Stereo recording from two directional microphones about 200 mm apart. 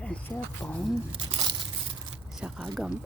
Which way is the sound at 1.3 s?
20° right (ahead or behind).